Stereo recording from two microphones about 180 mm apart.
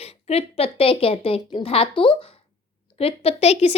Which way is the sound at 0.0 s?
35° left (ahead or behind).